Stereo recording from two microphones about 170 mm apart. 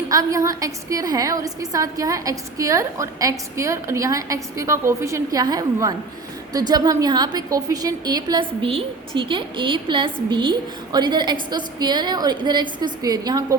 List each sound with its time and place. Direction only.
0.1 s a woman's voice: 20° right (ahead or behind)